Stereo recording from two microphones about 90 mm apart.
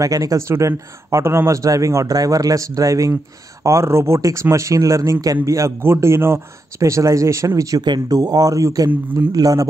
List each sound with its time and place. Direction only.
0.0 s speech: 40° right (ahead or behind)
7.8 s speech: 50° right (ahead or behind)